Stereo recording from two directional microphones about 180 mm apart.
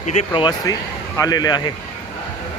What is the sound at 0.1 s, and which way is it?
Speech, 40° left (ahead or behind).